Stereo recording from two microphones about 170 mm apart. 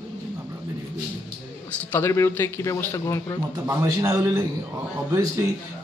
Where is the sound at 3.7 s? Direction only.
20° right (ahead or behind).